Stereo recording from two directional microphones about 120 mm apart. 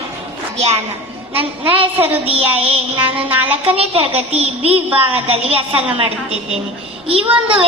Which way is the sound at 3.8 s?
55° right (ahead or behind).